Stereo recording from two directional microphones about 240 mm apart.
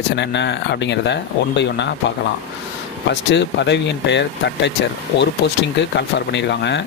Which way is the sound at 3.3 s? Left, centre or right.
Left.